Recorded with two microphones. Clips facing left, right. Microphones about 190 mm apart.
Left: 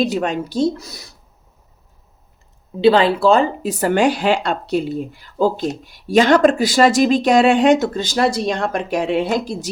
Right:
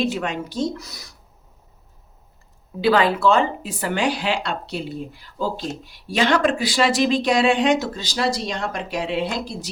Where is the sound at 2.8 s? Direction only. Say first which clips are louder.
Left 5 dB; 30° left (ahead or behind); by 4.8 s 45° left (ahead or behind).